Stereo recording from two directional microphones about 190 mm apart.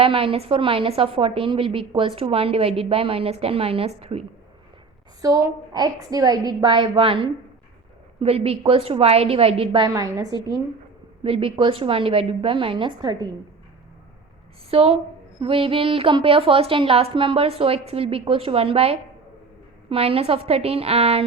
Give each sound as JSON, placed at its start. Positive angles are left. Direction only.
{"t": 0.0, "sound": "a woman's voice", "side_deg": -30}
{"t": 5.2, "sound": "a woman's voice", "side_deg": -20}
{"t": 14.7, "sound": "a woman's voice", "side_deg": -30}